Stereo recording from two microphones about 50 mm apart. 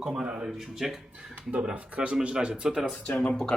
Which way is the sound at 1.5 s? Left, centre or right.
Right.